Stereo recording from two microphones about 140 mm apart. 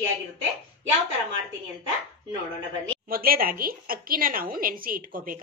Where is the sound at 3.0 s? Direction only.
90° right.